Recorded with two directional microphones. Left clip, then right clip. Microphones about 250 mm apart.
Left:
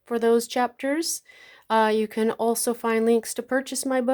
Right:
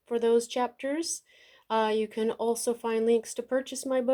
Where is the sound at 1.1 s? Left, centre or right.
Left.